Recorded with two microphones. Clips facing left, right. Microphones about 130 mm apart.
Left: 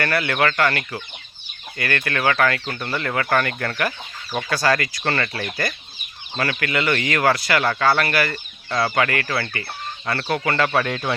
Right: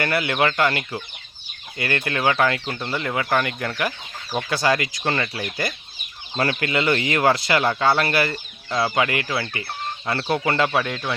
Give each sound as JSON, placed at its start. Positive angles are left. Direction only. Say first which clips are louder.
{"t": 0.0, "sound": "speech", "louder": "even", "side_deg": -20}
{"t": 6.3, "sound": "speech", "louder": "right 1 dB", "side_deg": -25}
{"t": 8.7, "sound": "speech", "louder": "left 1 dB", "side_deg": -15}
{"t": 10.7, "sound": "speech", "louder": "left 2 dB", "side_deg": -5}